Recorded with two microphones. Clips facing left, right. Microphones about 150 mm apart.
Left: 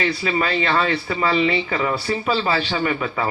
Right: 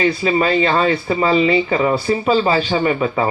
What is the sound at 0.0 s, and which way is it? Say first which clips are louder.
A man's voice: right 6 dB; 25° right (ahead or behind).